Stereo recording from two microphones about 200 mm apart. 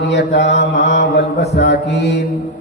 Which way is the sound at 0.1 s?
55° left (ahead or behind).